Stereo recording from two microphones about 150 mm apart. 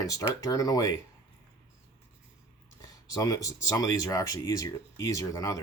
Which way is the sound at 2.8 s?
25° left (ahead or behind).